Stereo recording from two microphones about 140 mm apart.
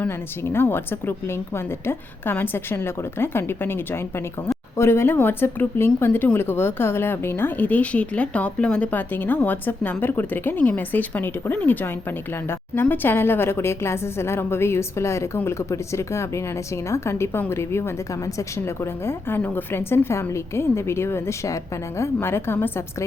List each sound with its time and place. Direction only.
0.5 s a woman's voice: 15° left (ahead or behind)